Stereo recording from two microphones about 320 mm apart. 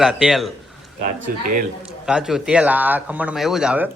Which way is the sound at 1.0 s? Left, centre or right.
Right.